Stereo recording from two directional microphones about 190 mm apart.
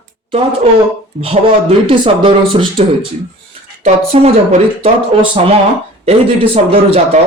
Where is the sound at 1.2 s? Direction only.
30° right (ahead or behind).